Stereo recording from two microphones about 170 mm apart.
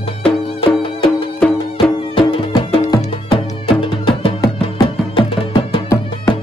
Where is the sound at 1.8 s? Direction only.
30° left (ahead or behind).